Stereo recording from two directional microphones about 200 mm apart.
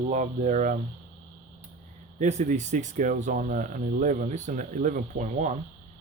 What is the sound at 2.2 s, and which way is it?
Speech, 35° right (ahead or behind).